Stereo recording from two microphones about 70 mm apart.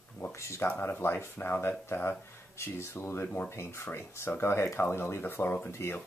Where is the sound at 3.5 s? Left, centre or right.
Left.